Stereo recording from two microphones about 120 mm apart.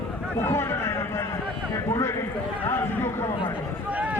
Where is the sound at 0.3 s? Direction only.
20° left (ahead or behind).